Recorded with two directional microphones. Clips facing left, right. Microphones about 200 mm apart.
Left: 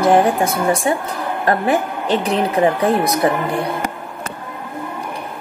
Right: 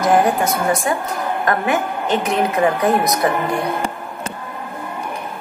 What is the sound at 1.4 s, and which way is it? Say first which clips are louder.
A woman's voice: left 3 dB; 35° left (ahead or behind).